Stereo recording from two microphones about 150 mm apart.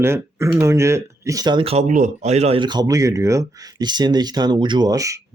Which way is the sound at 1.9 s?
55° right (ahead or behind).